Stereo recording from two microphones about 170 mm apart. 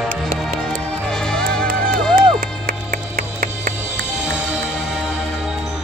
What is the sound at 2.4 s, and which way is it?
Music, 60° right (ahead or behind).